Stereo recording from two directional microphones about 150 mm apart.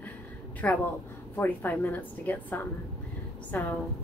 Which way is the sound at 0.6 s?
10° left (ahead or behind).